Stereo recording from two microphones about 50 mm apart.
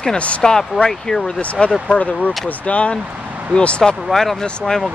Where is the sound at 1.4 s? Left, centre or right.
Left.